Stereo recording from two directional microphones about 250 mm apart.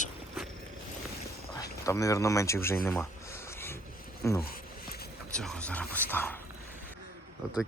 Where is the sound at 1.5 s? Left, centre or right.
Centre.